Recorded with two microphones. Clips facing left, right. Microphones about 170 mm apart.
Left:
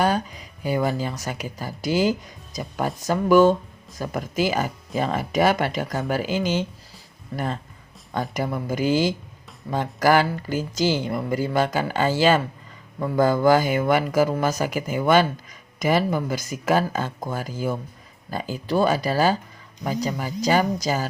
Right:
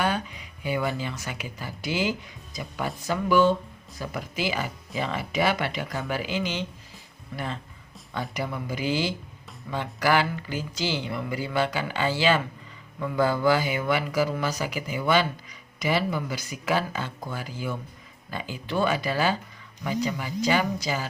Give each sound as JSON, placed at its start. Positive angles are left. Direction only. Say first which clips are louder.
{"t": 0.0, "sound": "speech", "louder": "left 5 dB", "side_deg": 40}